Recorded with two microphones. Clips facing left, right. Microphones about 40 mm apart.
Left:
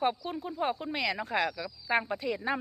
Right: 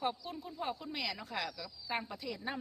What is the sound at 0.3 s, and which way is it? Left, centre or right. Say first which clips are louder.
Speech: left 8 dB; left.